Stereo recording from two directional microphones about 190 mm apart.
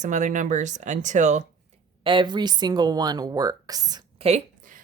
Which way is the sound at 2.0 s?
25° right (ahead or behind).